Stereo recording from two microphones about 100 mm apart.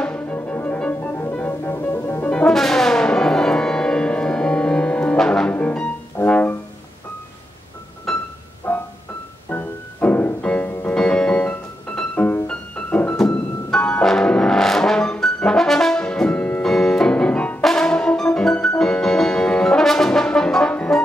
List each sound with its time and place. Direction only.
0.0 s music: 15° left (ahead or behind)
2.3 s brass instrument: 5° left (ahead or behind)
5.5 s music: 15° left (ahead or behind)
8.1 s music: 5° left (ahead or behind)
8.7 s music: 15° left (ahead or behind)